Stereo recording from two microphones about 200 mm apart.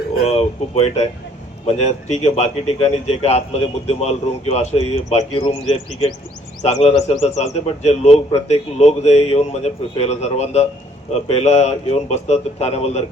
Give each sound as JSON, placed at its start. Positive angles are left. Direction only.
{"t": 0.3, "sound": "speech", "side_deg": 30}